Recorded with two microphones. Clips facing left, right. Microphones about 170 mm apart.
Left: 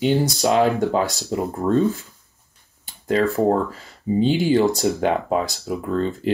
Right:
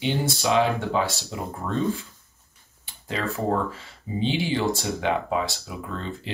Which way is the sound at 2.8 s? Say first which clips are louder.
Left 10 dB; 40° left (ahead or behind).